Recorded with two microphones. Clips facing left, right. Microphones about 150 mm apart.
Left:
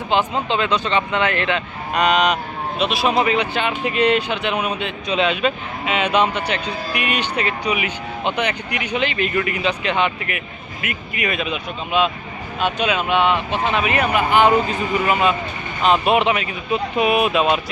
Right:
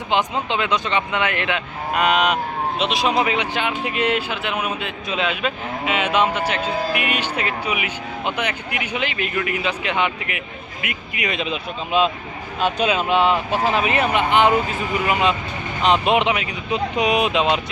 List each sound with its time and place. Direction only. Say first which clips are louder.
0.1 s speech: left 2 dB; 15° right (ahead or behind)
2.7 s speech: left 2 dB; 20° right (ahead or behind)